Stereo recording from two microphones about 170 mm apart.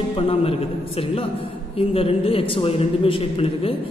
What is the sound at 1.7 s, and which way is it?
A woman's voice, 35° left (ahead or behind).